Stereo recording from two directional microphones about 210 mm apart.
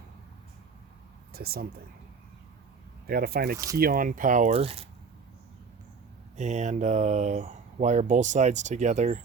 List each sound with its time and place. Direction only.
1.3 s speech: 50° right (ahead or behind)
3.1 s speech: 45° right (ahead or behind); by 4.9 s 30° right (ahead or behind)
6.3 s speech: 35° right (ahead or behind)